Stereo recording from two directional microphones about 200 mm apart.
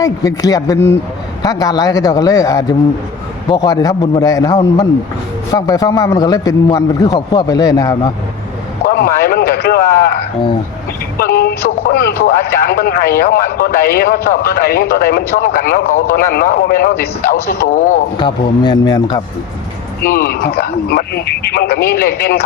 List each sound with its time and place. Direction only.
0.0 s a man's voice: 15° left (ahead or behind)
8.8 s a man's voice: 50° left (ahead or behind)
11.2 s a man's voice: 50° left (ahead or behind)
18.2 s a man's voice: 25° left (ahead or behind)
20.1 s a man's voice: 45° left (ahead or behind)